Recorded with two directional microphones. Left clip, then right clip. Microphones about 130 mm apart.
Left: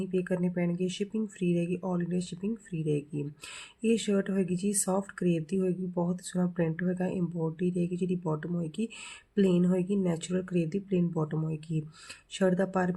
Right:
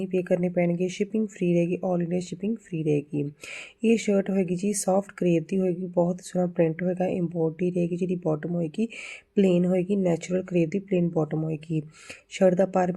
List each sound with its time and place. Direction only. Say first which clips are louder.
0.0 s speech: right 6 dB; 30° right (ahead or behind)